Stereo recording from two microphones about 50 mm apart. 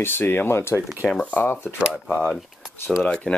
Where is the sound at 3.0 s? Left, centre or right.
Left.